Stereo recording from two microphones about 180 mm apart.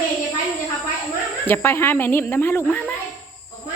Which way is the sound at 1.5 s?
10° left (ahead or behind).